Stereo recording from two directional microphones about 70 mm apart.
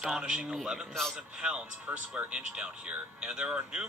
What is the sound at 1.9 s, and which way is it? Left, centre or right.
Speech, right.